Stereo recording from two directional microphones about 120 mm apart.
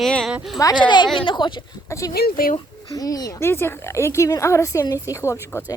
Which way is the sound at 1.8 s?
25° left (ahead or behind).